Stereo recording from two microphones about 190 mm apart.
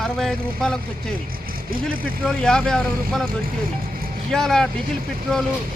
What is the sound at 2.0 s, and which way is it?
Speech, 50° right (ahead or behind).